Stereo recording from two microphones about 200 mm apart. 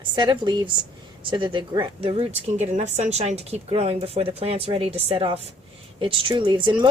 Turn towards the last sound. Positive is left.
turn(degrees=-25)  # may be behind; listen again after turning